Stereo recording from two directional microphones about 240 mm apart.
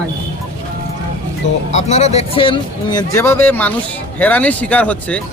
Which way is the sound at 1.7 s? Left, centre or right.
Left.